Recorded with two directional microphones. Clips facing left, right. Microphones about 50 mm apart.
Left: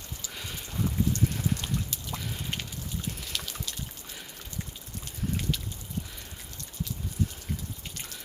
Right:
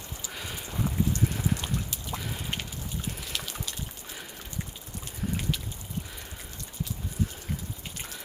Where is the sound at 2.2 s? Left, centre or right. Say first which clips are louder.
Right 1 dB; centre.